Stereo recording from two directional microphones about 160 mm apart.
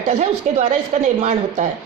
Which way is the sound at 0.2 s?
50° right (ahead or behind).